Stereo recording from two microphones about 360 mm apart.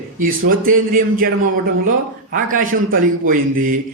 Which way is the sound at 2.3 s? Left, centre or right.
Right.